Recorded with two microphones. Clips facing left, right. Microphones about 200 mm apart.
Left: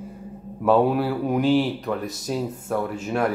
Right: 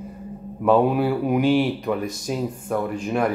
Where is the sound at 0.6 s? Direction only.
Centre (ahead or behind).